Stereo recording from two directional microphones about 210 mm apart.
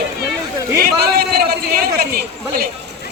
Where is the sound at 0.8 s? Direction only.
50° right (ahead or behind).